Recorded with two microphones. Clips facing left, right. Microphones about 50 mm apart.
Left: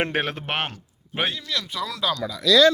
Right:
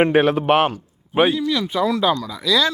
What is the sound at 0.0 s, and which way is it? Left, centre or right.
A man's voice, centre.